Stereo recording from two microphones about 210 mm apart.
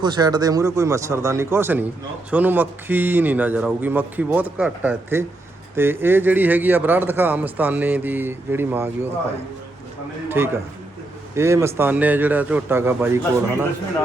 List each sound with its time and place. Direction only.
0.0 s a man's voice: 20° right (ahead or behind)
10.2 s a man's voice: 10° right (ahead or behind)